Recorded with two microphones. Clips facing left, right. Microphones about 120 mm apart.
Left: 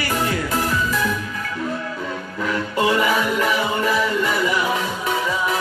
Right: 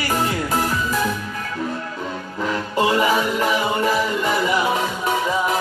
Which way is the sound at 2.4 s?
30° right (ahead or behind).